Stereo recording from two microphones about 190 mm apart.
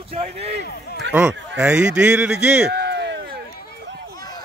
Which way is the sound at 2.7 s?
60° right (ahead or behind).